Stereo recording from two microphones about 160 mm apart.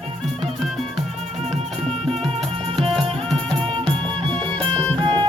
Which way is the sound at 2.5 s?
35° right (ahead or behind).